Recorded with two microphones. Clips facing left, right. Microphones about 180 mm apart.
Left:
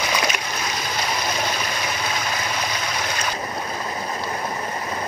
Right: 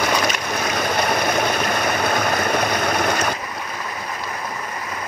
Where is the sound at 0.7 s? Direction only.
60° right (ahead or behind).